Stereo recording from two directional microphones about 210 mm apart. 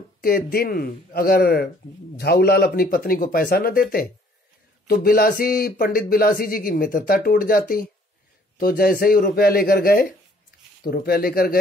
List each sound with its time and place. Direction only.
0.2 s speech: 45° left (ahead or behind)
4.8 s speech: 45° left (ahead or behind)